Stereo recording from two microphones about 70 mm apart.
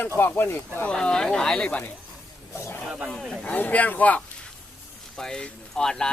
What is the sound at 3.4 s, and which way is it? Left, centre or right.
Speech, left.